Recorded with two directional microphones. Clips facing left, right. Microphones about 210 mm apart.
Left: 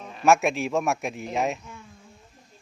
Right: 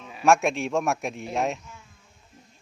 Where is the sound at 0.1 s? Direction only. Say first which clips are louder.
Even; centre (ahead or behind).